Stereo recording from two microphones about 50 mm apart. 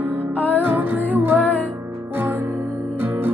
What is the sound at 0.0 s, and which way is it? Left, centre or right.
Music, right.